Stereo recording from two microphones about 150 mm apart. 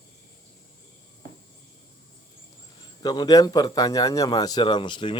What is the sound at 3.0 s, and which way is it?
A man's voice, 30° left (ahead or behind).